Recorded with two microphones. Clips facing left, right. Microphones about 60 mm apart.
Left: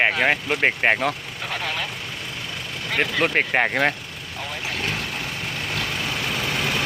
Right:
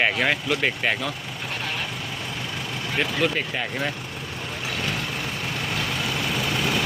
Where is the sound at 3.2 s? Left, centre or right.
Left.